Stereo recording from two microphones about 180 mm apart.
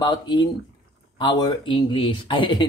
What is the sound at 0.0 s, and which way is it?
Speech, 25° left (ahead or behind).